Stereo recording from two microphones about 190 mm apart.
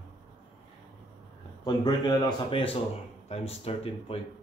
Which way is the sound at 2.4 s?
30° left (ahead or behind).